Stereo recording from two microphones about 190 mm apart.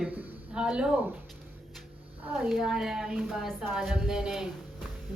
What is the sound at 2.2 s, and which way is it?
A man's voice, centre (ahead or behind).